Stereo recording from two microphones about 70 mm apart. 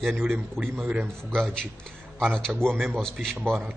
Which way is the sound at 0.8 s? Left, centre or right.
Right.